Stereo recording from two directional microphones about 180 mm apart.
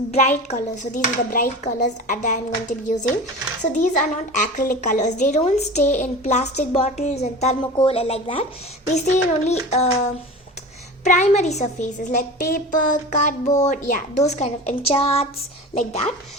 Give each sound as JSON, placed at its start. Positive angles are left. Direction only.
{"t": 0.1, "sound": "a child's voice", "side_deg": 40}
{"t": 11.0, "sound": "a woman's voice", "side_deg": 40}